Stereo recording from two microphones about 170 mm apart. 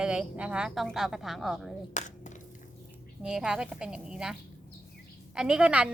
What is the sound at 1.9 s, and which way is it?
Dishes, 45° left (ahead or behind).